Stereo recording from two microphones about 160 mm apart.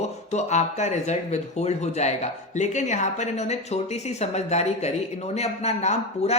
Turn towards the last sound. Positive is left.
turn(degrees=45)  # may be behind; listen again after turning